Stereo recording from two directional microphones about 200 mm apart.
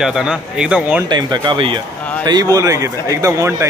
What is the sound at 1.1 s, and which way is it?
Speech, 20° right (ahead or behind).